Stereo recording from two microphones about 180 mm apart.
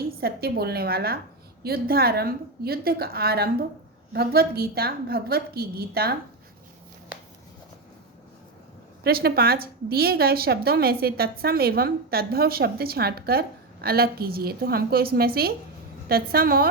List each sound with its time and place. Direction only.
0.2 s a woman's voice: 60° right (ahead or behind)
9.0 s a woman's voice: 60° right (ahead or behind)